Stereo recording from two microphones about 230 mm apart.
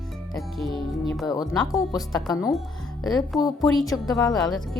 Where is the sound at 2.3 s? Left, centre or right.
Centre.